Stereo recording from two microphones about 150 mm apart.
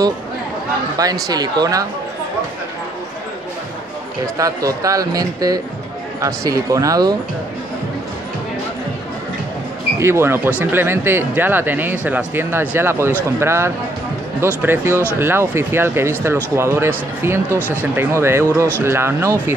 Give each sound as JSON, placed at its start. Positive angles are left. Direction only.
{"t": 0.9, "sound": "a man's voice", "side_deg": -25}
{"t": 4.4, "sound": "a man's voice", "side_deg": -25}
{"t": 9.9, "sound": "speech", "side_deg": -15}
{"t": 17.6, "sound": "speech", "side_deg": 15}
{"t": 17.9, "sound": "speech", "side_deg": -15}